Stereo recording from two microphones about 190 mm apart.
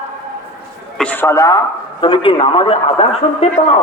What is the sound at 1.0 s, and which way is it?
Speech, 15° left (ahead or behind).